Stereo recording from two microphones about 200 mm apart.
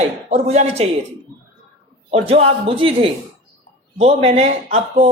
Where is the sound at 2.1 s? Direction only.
30° right (ahead or behind).